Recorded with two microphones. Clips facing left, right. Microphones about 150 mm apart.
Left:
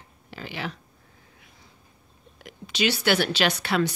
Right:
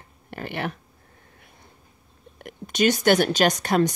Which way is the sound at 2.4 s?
50° right (ahead or behind).